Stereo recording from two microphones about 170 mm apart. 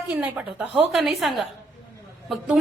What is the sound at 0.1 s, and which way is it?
A woman's voice, 5° right (ahead or behind).